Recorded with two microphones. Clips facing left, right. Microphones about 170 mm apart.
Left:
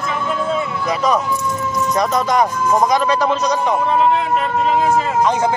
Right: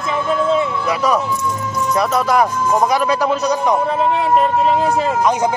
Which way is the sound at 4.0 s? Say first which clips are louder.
Right 1 dB; 35° right (ahead or behind).